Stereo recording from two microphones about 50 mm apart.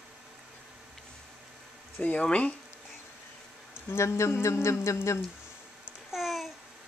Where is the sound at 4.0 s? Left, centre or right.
Left.